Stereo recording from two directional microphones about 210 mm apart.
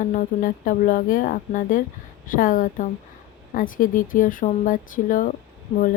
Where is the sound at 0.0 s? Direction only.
40° left (ahead or behind).